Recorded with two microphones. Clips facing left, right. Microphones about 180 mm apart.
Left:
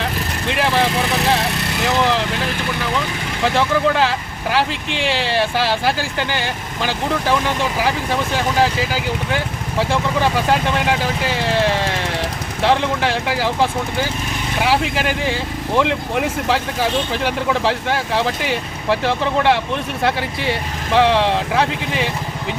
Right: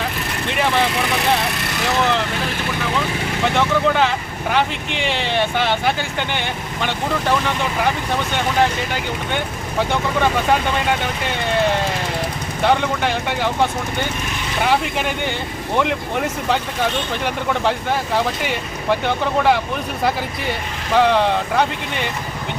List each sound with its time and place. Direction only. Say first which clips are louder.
0.4 s speech: left 1 dB; centre (ahead or behind)
3.4 s speech: left 1 dB; centre (ahead or behind)